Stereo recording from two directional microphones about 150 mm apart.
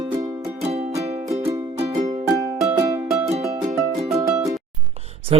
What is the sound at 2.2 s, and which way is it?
Music, 20° right (ahead or behind).